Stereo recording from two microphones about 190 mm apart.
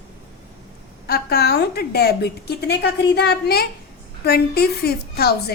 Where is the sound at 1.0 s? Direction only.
55° left (ahead or behind).